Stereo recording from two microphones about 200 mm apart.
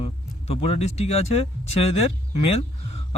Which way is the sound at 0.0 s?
30° left (ahead or behind).